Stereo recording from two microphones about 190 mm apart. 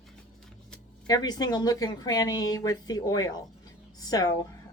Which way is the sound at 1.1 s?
20° left (ahead or behind).